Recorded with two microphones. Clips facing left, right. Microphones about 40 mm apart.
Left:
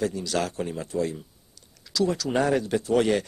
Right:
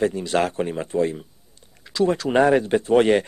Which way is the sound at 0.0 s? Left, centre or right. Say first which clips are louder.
Right 6 dB; right.